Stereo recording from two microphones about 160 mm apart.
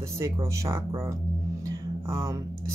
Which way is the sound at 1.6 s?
15° right (ahead or behind).